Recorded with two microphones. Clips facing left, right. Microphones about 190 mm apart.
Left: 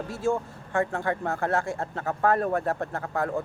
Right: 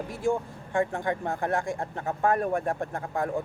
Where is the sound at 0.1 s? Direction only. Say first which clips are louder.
Left 1 dB; 15° right (ahead or behind).